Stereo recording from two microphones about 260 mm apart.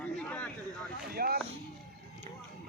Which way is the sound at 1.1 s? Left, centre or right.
Right.